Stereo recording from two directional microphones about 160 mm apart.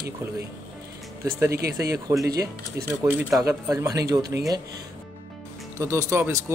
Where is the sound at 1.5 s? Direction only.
80° right.